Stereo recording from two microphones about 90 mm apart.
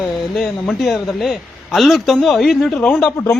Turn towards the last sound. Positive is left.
turn(degrees=30)  # may be behind; listen again after turning